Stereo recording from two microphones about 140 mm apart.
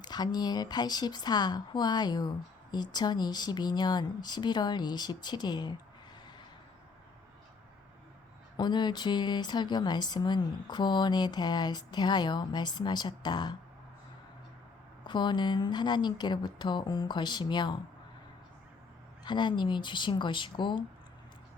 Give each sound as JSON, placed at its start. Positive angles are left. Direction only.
{"t": 0.0, "sound": "a woman's voice", "side_deg": 30}
{"t": 8.5, "sound": "a woman's voice", "side_deg": 30}
{"t": 15.0, "sound": "a woman's voice", "side_deg": 35}
{"t": 19.2, "sound": "a woman's voice", "side_deg": 35}